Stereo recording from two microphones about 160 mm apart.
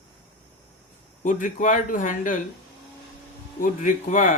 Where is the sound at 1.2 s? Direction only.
50° left (ahead or behind).